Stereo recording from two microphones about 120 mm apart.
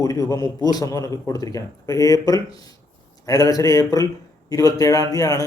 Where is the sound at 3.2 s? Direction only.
30° left (ahead or behind).